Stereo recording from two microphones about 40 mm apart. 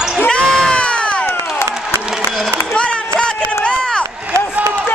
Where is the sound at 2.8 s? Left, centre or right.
Left.